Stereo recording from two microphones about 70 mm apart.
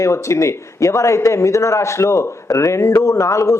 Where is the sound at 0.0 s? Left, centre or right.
Left.